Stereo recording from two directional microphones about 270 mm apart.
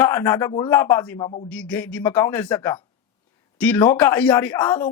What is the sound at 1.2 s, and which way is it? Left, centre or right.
Speech, left.